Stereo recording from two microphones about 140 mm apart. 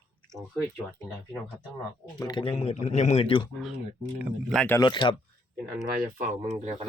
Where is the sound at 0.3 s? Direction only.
5° left (ahead or behind).